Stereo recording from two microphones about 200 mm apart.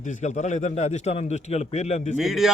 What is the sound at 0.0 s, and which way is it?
A man's voice, 35° left (ahead or behind).